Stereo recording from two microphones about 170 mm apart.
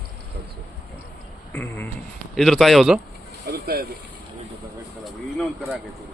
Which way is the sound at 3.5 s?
65° right (ahead or behind).